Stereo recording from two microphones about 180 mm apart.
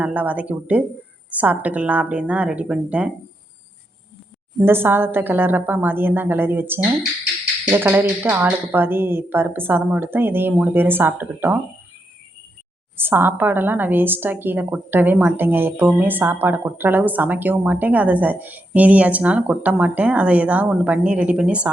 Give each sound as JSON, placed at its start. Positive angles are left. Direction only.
{"t": 0.0, "sound": "a woman's voice", "side_deg": -10}
{"t": 4.6, "sound": "a woman's voice", "side_deg": -10}
{"t": 13.0, "sound": "a woman's voice", "side_deg": -10}